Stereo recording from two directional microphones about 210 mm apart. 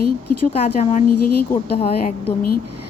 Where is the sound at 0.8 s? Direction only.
35° left (ahead or behind).